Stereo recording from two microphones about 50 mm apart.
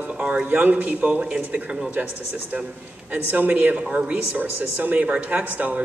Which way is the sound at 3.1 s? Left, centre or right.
Right.